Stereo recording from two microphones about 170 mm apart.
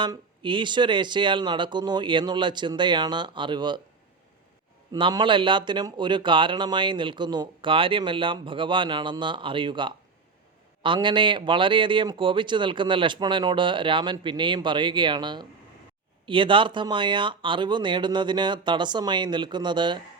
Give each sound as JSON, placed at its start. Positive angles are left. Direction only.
{"t": 0.0, "sound": "speech", "side_deg": -30}
{"t": 4.9, "sound": "speech", "side_deg": -25}